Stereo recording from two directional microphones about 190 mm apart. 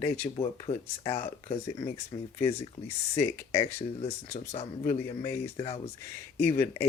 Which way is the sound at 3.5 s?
30° left (ahead or behind).